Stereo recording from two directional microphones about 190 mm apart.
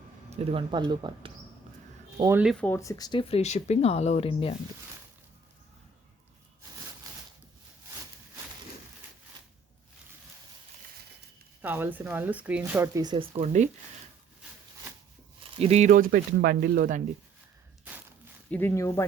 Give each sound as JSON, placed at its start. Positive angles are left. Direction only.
{"t": 0.3, "sound": "speech", "side_deg": -30}
{"t": 2.4, "sound": "speech", "side_deg": 0}
{"t": 2.6, "sound": "speech", "side_deg": 15}
{"t": 11.6, "sound": "speech", "side_deg": -10}
{"t": 15.5, "sound": "speech", "side_deg": -35}
{"t": 18.5, "sound": "speech", "side_deg": 10}